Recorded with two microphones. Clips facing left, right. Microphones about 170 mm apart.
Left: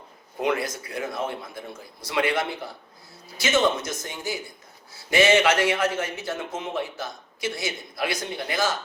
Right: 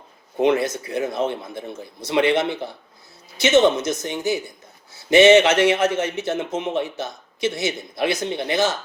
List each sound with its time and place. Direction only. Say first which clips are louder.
0.3 s a man's voice: right 7 dB; 25° right (ahead or behind)